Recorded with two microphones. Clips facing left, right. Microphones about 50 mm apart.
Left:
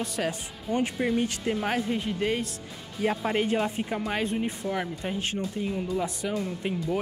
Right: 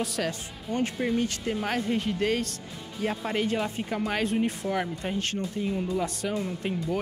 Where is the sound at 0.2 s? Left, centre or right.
Centre.